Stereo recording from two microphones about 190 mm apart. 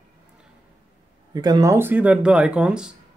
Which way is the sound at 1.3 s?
20° right (ahead or behind).